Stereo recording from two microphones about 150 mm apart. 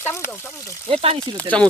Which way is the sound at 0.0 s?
15° left (ahead or behind).